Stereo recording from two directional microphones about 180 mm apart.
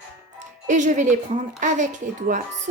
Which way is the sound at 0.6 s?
45° right (ahead or behind).